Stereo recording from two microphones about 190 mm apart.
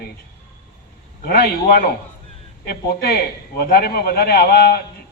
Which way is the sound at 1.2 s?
55° left (ahead or behind).